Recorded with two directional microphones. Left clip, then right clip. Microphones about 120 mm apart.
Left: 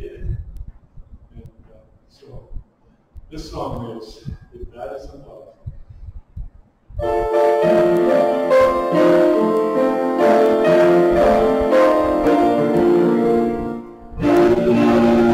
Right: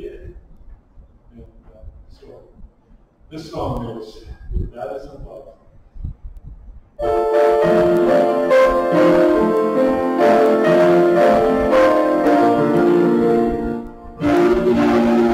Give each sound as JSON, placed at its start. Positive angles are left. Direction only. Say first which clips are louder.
{"t": 3.3, "sound": "a man's voice", "louder": "right 2 dB", "side_deg": 5}
{"t": 4.7, "sound": "a sound", "louder": "right 2 dB", "side_deg": 0}
{"t": 7.0, "sound": "music", "louder": "right 2 dB", "side_deg": 0}